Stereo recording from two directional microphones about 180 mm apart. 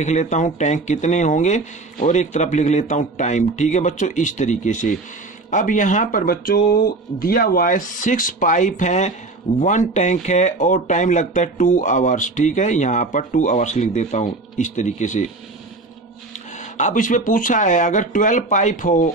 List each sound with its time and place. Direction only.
0.0 s speech: 40° left (ahead or behind)
16.7 s speech: 45° left (ahead or behind)